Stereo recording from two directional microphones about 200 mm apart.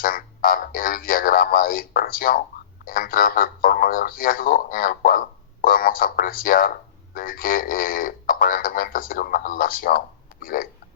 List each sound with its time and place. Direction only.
0.0 s speech: 45° left (ahead or behind)